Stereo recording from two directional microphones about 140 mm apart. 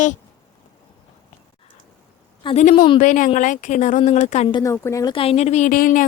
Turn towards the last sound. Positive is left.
turn(degrees=75)  # may be behind; listen again after turning